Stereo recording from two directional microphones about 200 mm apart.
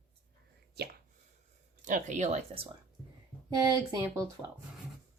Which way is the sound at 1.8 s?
40° right (ahead or behind).